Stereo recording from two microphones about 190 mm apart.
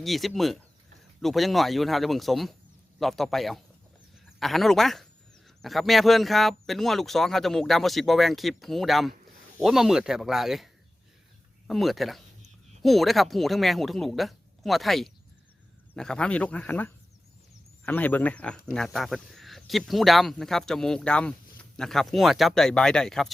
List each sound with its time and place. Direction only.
0.0 s speech: centre (ahead or behind)
11.7 s speech: centre (ahead or behind)